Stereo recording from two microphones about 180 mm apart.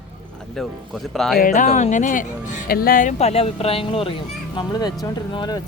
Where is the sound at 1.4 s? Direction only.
45° left (ahead or behind); by 5.6 s 25° left (ahead or behind).